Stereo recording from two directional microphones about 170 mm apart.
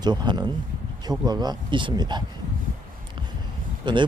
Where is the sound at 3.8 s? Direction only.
25° right (ahead or behind).